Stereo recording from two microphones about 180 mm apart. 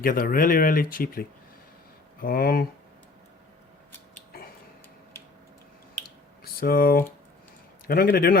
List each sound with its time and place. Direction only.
0.0 s speech: 55° left (ahead or behind)
6.4 s speech: 55° left (ahead or behind)